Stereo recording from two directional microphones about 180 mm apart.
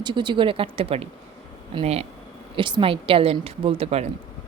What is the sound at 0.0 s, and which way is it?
Speech, 25° right (ahead or behind).